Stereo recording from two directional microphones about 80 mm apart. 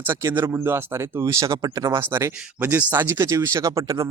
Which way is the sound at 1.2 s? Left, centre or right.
Right.